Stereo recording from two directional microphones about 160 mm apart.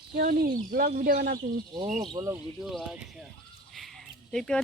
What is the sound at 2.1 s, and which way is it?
Speech, 20° right (ahead or behind).